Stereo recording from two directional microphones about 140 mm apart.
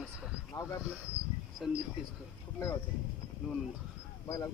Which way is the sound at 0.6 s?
20° left (ahead or behind).